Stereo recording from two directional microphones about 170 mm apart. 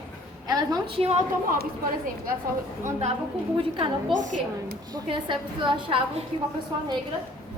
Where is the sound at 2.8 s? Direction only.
40° right (ahead or behind).